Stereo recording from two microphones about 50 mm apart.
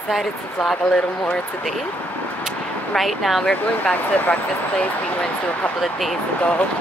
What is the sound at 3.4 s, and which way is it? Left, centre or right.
Speech, left.